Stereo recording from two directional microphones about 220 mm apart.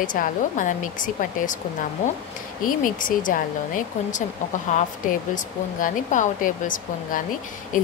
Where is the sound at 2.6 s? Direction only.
40° left (ahead or behind).